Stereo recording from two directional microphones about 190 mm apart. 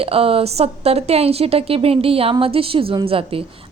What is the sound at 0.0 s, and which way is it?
A woman's voice, 30° right (ahead or behind).